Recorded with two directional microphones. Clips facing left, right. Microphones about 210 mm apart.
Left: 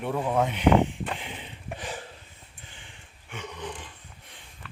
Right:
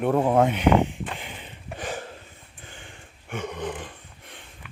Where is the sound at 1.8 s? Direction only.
45° right (ahead or behind).